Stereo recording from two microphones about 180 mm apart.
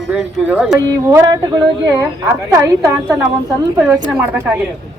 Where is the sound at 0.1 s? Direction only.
5° right (ahead or behind).